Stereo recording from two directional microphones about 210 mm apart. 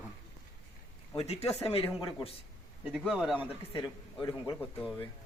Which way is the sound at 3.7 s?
20° left (ahead or behind).